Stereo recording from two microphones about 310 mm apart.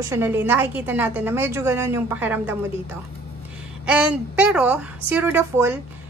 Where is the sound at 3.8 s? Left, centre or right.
Centre.